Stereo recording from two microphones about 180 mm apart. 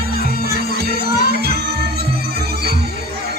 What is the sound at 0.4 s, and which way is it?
Music, 60° right (ahead or behind).